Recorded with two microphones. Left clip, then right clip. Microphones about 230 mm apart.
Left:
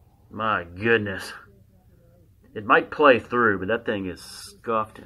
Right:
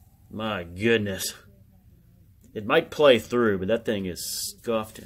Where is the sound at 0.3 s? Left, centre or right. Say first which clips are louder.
Left 6 dB; right.